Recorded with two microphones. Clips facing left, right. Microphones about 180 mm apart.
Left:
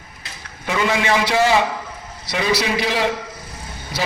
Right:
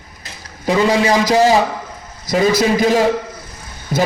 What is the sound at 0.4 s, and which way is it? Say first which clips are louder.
A man's voice: right 6 dB; 35° right (ahead or behind).